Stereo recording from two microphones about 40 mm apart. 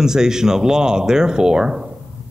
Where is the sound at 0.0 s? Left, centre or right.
Centre.